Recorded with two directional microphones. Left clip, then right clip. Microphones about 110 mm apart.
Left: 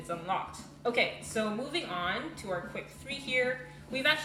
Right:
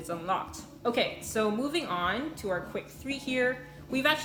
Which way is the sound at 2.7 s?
60° right (ahead or behind).